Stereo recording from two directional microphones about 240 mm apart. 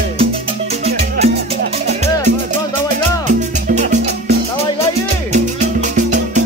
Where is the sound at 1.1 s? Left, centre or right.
Right.